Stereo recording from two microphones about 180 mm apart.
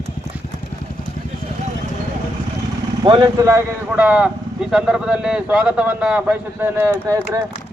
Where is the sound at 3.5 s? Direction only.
10° right (ahead or behind).